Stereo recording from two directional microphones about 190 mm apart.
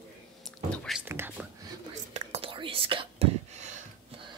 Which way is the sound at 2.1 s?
30° right (ahead or behind).